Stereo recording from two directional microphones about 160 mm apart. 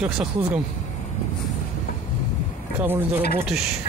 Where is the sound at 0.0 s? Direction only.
5° right (ahead or behind).